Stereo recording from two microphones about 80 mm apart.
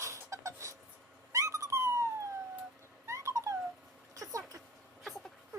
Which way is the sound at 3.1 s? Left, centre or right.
Right.